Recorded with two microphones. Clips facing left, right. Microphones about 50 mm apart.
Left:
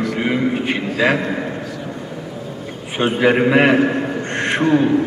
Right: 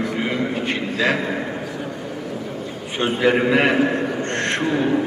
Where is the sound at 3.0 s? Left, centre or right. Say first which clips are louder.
Left 3 dB; centre.